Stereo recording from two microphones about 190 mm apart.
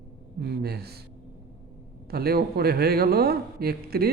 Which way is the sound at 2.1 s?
55° right (ahead or behind).